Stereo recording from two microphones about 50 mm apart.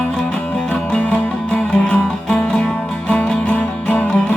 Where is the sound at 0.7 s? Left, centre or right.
Left.